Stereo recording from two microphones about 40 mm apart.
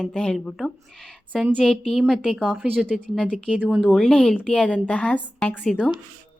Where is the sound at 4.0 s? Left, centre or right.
Centre.